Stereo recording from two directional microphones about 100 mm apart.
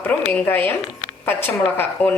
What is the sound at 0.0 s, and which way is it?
A woman's voice, 15° left (ahead or behind).